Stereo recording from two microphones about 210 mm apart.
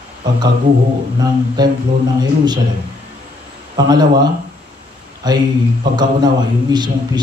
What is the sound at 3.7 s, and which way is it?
Speech, 20° right (ahead or behind).